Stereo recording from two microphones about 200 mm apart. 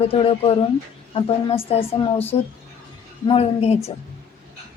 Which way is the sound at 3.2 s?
30° left (ahead or behind).